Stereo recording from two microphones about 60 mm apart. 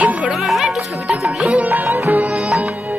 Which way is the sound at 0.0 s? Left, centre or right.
Right.